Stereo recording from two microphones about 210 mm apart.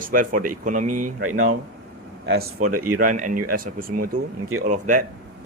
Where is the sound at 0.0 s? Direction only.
40° right (ahead or behind).